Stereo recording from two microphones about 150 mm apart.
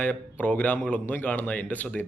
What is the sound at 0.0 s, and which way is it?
A man's voice, 10° left (ahead or behind).